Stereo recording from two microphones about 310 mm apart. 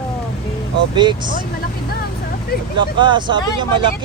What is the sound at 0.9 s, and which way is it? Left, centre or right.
Speech, centre.